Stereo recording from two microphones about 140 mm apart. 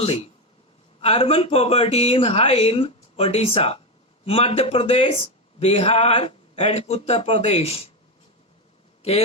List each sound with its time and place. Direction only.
0.0 s speech: 45° left (ahead or behind)